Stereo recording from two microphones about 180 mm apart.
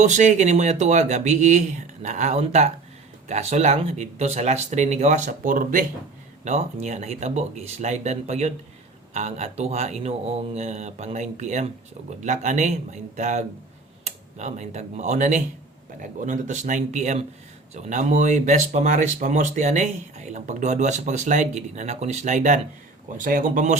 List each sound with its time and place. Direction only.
0.0 s speech: 40° right (ahead or behind)